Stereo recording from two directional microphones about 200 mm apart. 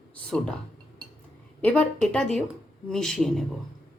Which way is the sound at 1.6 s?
5° left (ahead or behind).